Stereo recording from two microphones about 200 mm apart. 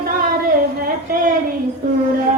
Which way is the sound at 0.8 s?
45° right (ahead or behind).